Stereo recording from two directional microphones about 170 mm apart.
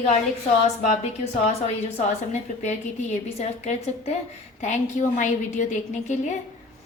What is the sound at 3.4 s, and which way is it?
A woman's voice, 40° left (ahead or behind).